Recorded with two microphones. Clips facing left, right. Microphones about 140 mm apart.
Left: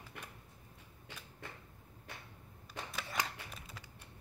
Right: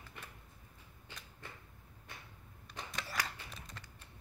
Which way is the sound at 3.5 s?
5° left (ahead or behind).